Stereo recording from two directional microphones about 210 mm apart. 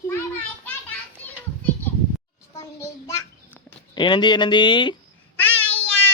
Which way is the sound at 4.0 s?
20° left (ahead or behind).